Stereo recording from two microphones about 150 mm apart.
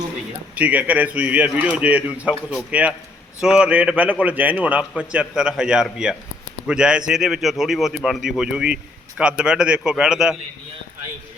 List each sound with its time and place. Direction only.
0.5 s a man's voice: 10° right (ahead or behind)